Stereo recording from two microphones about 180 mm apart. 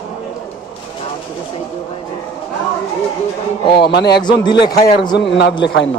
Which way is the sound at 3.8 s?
65° left (ahead or behind).